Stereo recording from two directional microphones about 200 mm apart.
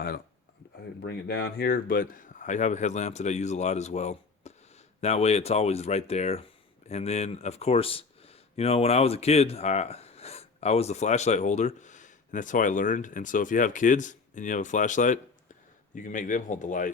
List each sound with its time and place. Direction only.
1.0 s speech: 55° left (ahead or behind); by 16.9 s 40° left (ahead or behind)